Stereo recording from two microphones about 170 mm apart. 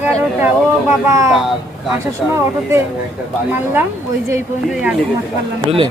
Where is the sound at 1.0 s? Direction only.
20° right (ahead or behind).